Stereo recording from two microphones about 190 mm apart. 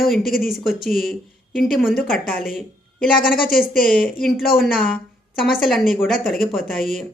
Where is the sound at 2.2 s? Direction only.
50° left (ahead or behind).